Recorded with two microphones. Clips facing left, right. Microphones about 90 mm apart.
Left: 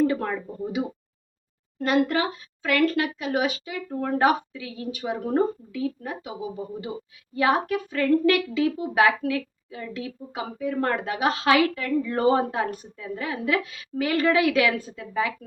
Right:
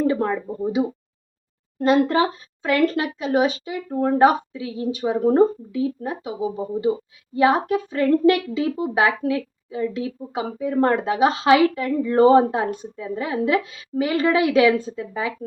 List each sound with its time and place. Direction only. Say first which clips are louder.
0.1 s a woman's voice: right 5 dB; 25° right (ahead or behind)